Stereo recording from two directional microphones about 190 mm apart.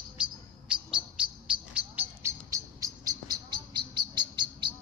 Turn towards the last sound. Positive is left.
turn(degrees=-25)  # may be behind; listen again after turning